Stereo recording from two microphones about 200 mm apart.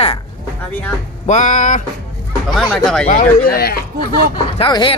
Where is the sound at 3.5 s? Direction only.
50° left (ahead or behind).